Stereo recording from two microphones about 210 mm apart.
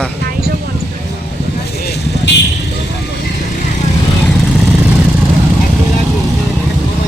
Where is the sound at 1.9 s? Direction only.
55° left (ahead or behind).